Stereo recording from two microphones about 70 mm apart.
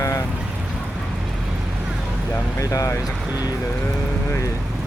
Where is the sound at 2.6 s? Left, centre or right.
Left.